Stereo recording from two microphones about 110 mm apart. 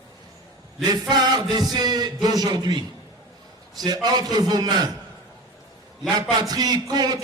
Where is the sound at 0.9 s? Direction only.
35° right (ahead or behind).